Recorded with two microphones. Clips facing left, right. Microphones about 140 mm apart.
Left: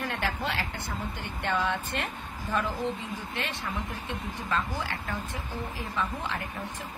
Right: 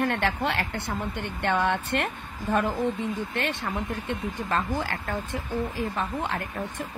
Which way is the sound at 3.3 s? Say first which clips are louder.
Right 5 dB; 50° right (ahead or behind).